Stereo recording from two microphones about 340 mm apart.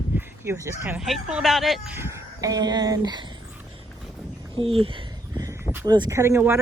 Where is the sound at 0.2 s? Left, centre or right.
Centre.